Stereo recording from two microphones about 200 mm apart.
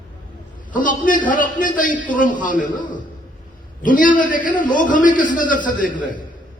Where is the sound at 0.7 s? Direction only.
40° left (ahead or behind).